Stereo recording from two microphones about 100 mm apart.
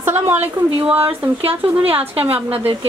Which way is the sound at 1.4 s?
75° right (ahead or behind).